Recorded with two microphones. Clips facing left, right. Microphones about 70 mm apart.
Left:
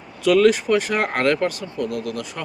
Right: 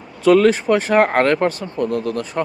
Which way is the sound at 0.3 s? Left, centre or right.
Right.